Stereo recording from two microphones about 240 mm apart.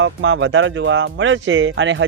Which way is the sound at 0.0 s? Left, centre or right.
Right.